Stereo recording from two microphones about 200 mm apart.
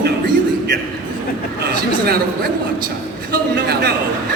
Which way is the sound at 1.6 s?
50° right (ahead or behind).